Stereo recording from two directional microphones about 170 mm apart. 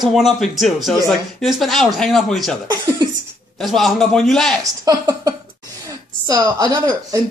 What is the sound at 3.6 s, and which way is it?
Speech, centre (ahead or behind).